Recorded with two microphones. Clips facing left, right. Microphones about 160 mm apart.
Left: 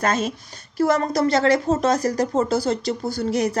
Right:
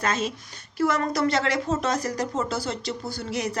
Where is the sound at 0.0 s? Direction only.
45° left (ahead or behind).